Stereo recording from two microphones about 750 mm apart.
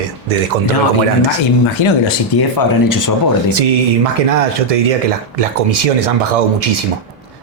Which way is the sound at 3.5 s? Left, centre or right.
Right.